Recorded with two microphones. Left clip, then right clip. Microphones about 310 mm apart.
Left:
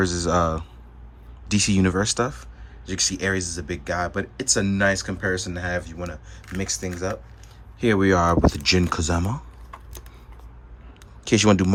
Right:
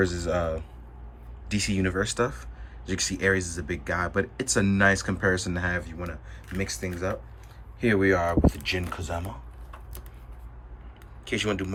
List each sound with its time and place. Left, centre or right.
0.0 s speech: centre
11.3 s speech: centre